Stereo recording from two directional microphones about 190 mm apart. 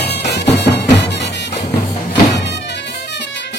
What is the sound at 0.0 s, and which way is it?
Music, 60° left (ahead or behind).